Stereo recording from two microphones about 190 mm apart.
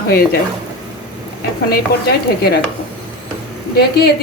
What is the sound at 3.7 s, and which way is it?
Speech, 55° left (ahead or behind).